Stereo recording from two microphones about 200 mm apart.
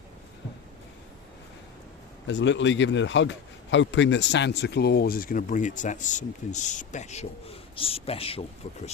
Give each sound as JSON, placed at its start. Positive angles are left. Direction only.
{"t": 2.2, "sound": "a man's voice", "side_deg": 65}